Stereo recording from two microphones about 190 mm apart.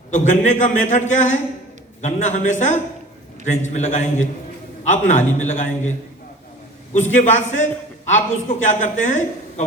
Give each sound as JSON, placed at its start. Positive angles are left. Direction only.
{"t": 0.1, "sound": "a man's voice", "side_deg": 40}
{"t": 6.9, "sound": "a man's voice", "side_deg": 40}